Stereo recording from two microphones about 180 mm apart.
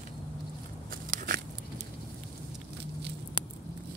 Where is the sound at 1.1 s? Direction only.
50° right (ahead or behind).